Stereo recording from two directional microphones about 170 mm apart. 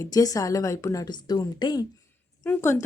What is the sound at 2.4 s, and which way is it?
Speech, 10° left (ahead or behind).